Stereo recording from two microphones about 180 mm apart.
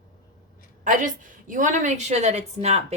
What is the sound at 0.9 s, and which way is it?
Speech, 45° right (ahead or behind).